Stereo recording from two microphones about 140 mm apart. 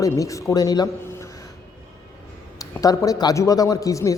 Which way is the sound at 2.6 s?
25° left (ahead or behind).